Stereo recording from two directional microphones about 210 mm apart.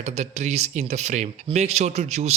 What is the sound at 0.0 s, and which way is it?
Speech, 30° right (ahead or behind).